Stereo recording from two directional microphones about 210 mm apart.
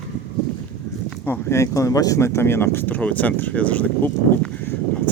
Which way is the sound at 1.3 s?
15° left (ahead or behind).